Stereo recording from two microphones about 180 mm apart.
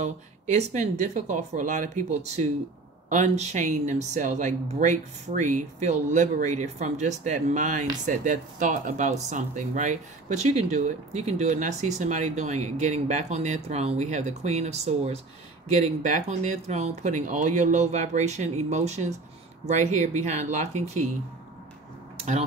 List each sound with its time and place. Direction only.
0.0 s speech: 40° right (ahead or behind)